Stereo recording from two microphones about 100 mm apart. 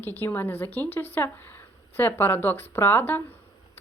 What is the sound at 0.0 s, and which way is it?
Speech, 20° left (ahead or behind).